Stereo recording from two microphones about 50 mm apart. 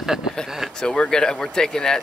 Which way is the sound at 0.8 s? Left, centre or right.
Centre.